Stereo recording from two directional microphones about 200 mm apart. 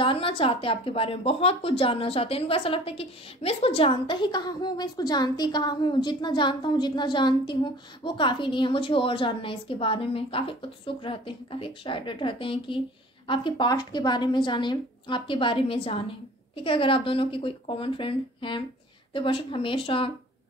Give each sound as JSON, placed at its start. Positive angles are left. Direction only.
{"t": 0.0, "sound": "speech", "side_deg": 25}